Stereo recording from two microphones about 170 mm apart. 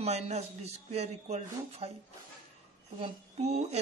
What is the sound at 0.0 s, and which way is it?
Speech, 40° right (ahead or behind).